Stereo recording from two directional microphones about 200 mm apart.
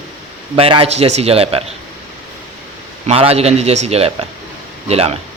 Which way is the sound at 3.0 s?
30° right (ahead or behind).